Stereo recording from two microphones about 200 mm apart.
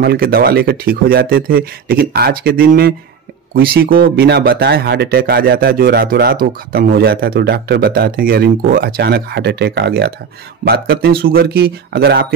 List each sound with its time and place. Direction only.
0.0 s speech: 50° right (ahead or behind)